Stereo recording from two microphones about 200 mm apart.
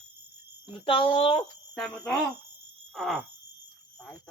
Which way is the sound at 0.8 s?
25° left (ahead or behind).